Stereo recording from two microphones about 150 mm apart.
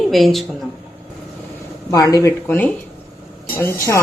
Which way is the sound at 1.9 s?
25° left (ahead or behind).